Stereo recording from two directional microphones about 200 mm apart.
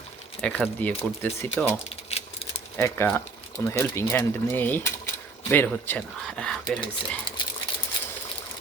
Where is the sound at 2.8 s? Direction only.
15° left (ahead or behind).